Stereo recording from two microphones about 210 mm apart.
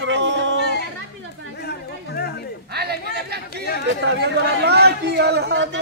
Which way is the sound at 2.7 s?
50° right (ahead or behind).